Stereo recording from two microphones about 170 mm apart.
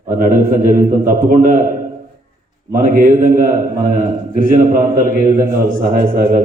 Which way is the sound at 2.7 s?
50° right (ahead or behind).